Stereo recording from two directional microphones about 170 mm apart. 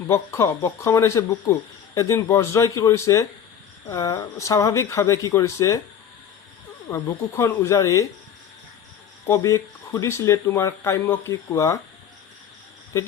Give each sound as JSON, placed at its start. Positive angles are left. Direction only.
{"t": 0.1, "sound": "speech", "side_deg": 15}
{"t": 6.9, "sound": "speech", "side_deg": 15}
{"t": 9.2, "sound": "speech", "side_deg": 15}